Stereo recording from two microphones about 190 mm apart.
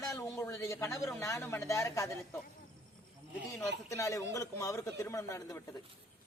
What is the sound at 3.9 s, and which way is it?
A man's voice, 15° left (ahead or behind).